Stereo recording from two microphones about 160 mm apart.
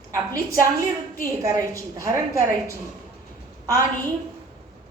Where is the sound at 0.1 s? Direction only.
20° right (ahead or behind).